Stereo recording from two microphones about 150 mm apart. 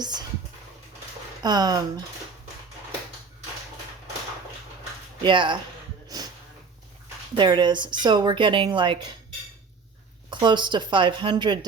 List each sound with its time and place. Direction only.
0.0 s speech: 30° right (ahead or behind)
1.4 s speech: 30° right (ahead or behind)
5.2 s speech: 30° right (ahead or behind)
6.1 s a sound: 25° right (ahead or behind)
7.3 s speech: 30° right (ahead or behind)
10.2 s speech: 30° right (ahead or behind)